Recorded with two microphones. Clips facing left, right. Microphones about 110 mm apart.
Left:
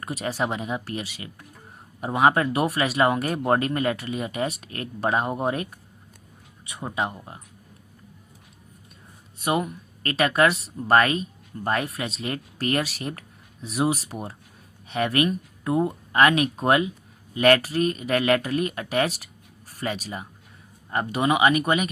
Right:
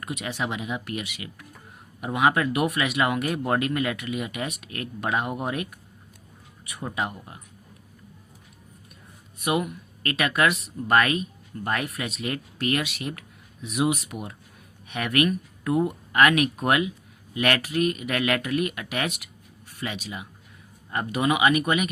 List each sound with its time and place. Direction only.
0.0 s a woman's voice: 35° left (ahead or behind)
9.4 s a woman's voice: 30° left (ahead or behind)